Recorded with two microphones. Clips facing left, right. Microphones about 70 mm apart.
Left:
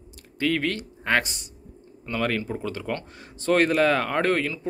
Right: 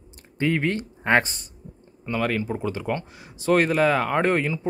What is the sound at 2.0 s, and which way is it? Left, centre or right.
Speech, centre.